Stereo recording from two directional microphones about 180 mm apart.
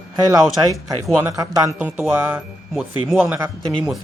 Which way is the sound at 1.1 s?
15° right (ahead or behind).